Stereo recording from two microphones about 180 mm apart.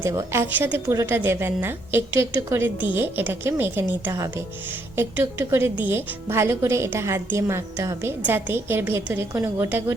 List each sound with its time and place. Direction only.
0.0 s a woman's voice: 15° right (ahead or behind)